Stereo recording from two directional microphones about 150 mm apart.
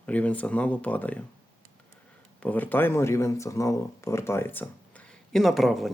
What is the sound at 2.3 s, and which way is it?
Speech, 10° left (ahead or behind).